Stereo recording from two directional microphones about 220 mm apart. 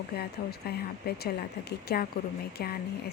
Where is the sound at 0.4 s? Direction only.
40° left (ahead or behind).